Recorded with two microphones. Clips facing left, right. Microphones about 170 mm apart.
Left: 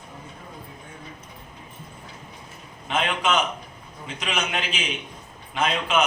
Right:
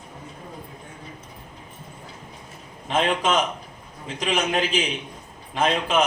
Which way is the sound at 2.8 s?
35° right (ahead or behind).